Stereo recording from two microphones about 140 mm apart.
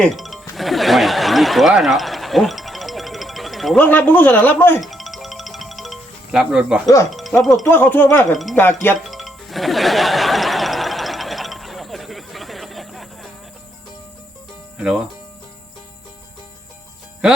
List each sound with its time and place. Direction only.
0.0 s music: centre (ahead or behind)
3.8 s a man's voice: 10° left (ahead or behind)
4.8 s music: centre (ahead or behind)
6.8 s speech: 20° left (ahead or behind)
7.1 s music: centre (ahead or behind)
7.4 s speech: centre (ahead or behind)
7.7 s a man's voice: 15° left (ahead or behind)
8.3 s speech: centre (ahead or behind)
8.5 s a man's voice: 15° left (ahead or behind)
9.0 s music: centre (ahead or behind)
14.8 s speech: 5° right (ahead or behind)